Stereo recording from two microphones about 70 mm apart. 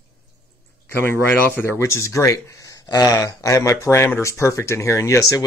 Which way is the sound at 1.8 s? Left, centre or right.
Left.